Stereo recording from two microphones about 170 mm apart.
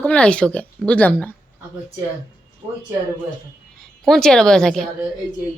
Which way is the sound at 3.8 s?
5° left (ahead or behind).